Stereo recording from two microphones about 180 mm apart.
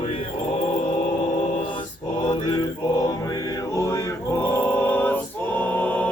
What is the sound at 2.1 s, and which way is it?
Mantra, 25° left (ahead or behind).